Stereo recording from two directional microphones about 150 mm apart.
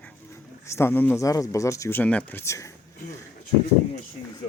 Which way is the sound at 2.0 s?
10° left (ahead or behind).